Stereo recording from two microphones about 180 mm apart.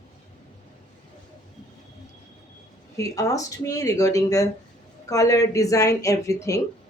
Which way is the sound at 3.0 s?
20° left (ahead or behind).